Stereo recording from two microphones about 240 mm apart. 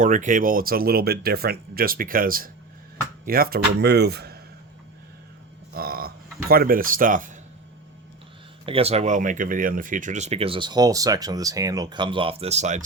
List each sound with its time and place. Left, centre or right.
0.0 s speech: right
5.7 s speech: right
8.6 s speech: right